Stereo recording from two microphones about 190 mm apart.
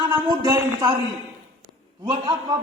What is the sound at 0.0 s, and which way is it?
Speech, 20° right (ahead or behind).